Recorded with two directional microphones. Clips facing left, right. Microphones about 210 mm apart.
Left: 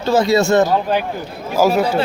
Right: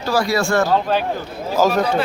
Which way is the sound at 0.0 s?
25° left (ahead or behind).